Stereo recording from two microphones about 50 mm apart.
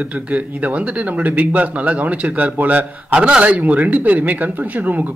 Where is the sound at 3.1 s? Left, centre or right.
Right.